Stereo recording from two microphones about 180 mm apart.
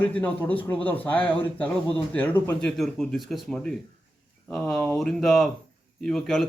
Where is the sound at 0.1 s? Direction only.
10° left (ahead or behind).